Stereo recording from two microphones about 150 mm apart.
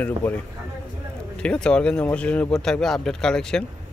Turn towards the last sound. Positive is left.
turn(degrees=5)  # may be behind; listen again after turning